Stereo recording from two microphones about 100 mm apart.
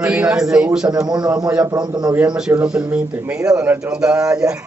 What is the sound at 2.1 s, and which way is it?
A woman's voice, 10° right (ahead or behind).